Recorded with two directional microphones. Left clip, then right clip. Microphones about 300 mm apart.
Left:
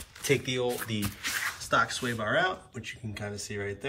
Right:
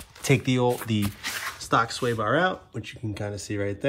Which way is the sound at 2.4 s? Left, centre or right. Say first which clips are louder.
Right 4 dB; centre.